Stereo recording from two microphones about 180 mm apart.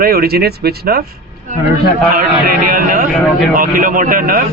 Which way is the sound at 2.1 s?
55° right (ahead or behind).